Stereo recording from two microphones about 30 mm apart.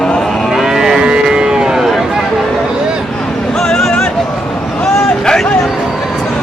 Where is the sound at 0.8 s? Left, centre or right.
Right.